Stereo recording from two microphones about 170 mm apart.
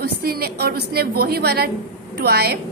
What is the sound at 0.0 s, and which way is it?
A woman's voice, 65° right (ahead or behind).